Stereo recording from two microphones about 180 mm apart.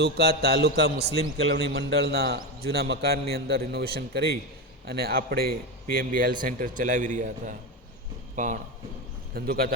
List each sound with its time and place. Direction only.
0.0 s a man's voice: 65° right (ahead or behind); by 8.5 s 45° right (ahead or behind)
9.3 s speech: 55° right (ahead or behind)